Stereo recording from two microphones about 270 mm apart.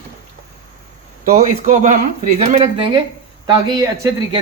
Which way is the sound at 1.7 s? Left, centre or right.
Right.